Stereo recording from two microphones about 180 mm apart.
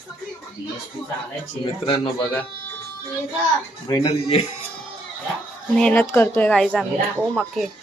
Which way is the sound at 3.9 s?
20° left (ahead or behind).